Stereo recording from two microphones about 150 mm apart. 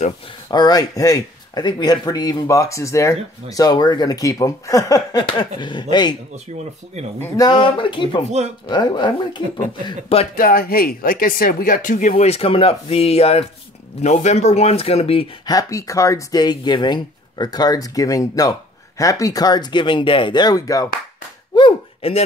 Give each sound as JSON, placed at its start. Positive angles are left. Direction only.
{"t": 0.5, "sound": "speech", "side_deg": 25}
{"t": 7.2, "sound": "speech", "side_deg": 15}
{"t": 7.4, "sound": "speech", "side_deg": 35}
{"t": 9.8, "sound": "speech", "side_deg": 40}
{"t": 10.3, "sound": "speech", "side_deg": 75}
{"t": 15.4, "sound": "speech", "side_deg": 25}
{"t": 21.5, "sound": "a sound", "side_deg": 35}